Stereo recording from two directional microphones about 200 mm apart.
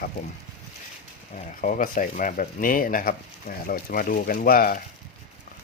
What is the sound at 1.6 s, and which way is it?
Speech, 40° left (ahead or behind).